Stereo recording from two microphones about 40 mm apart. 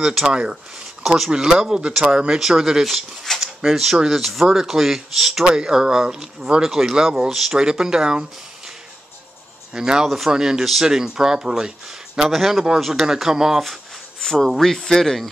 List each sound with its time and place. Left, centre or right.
0.3 s speech: right
2.3 s speech: centre
5.4 s speech: right; by 7.5 s centre
7.5 s speech: right
9.8 s speech: centre
10.0 s speech: centre
10.3 s speech: centre
12.3 s speech: centre
14.2 s speech: centre